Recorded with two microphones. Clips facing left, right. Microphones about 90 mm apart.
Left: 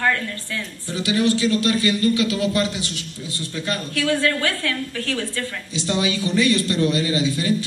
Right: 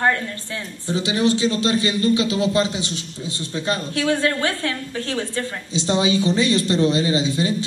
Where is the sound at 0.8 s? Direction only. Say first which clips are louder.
Right 1 dB; 25° right (ahead or behind).